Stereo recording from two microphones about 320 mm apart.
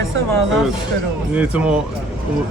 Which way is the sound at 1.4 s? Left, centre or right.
Centre.